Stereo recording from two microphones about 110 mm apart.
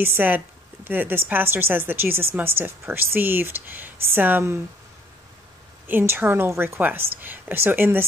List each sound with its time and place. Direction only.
0.0 s a woman's voice: 20° right (ahead or behind)
5.9 s a woman's voice: 15° right (ahead or behind)